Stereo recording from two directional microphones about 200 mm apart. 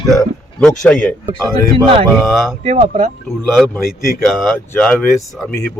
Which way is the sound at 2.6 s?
30° right (ahead or behind).